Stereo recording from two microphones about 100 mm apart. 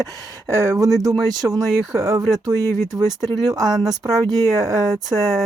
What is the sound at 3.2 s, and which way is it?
Speech, 45° right (ahead or behind).